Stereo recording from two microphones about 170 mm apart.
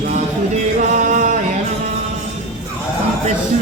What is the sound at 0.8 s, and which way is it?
Music, 45° right (ahead or behind).